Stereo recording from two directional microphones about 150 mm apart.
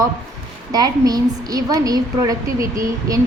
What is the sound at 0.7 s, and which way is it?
A woman's voice, 25° right (ahead or behind).